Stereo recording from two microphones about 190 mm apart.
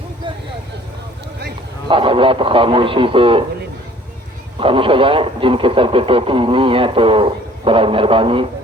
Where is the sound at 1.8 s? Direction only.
25° right (ahead or behind).